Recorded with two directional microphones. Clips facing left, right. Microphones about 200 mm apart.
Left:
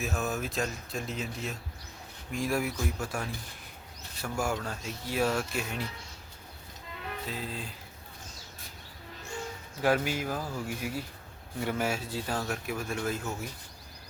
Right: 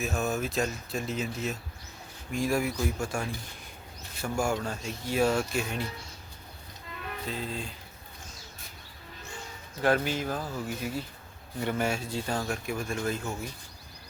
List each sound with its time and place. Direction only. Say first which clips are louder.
0.0 s speech: right 3 dB; centre (ahead or behind)
7.3 s speech: right 4 dB; 5° left (ahead or behind)
9.8 s speech: right 1 dB; 10° left (ahead or behind)